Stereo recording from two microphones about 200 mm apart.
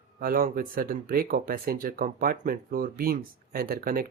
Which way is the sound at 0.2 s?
45° right (ahead or behind).